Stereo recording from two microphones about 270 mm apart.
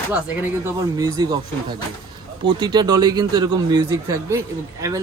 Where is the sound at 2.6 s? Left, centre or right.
Centre.